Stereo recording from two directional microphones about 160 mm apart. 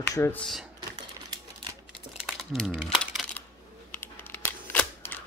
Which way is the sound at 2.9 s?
5° left (ahead or behind).